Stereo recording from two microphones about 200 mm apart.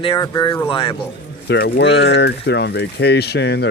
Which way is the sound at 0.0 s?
20° left (ahead or behind).